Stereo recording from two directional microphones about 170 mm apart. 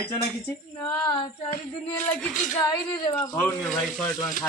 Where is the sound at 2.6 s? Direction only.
25° left (ahead or behind).